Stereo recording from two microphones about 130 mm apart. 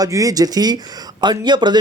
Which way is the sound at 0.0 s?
25° right (ahead or behind).